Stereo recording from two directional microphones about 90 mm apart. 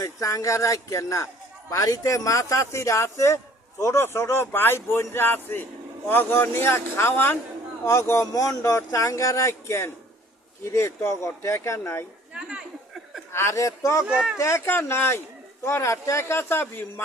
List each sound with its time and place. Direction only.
0.0 s a man's voice: 40° left (ahead or behind)
12.3 s a sound: 10° right (ahead or behind)
13.3 s a man's voice: 30° left (ahead or behind)
14.1 s speech: 5° right (ahead or behind)
14.3 s speech: 30° left (ahead or behind)